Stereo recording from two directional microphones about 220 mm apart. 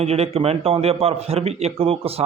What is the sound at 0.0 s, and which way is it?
Speech, 30° right (ahead or behind).